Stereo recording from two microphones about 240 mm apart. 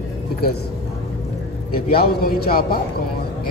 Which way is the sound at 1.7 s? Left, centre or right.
Left.